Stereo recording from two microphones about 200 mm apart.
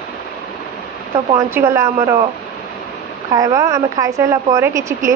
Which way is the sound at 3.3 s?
15° right (ahead or behind).